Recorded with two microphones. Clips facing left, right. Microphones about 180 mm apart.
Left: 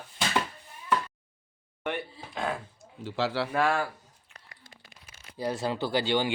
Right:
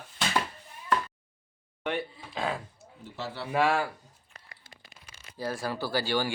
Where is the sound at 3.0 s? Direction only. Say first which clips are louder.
Left 9 dB; 90° left.